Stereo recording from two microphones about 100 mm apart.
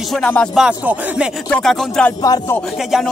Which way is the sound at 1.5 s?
5° left (ahead or behind).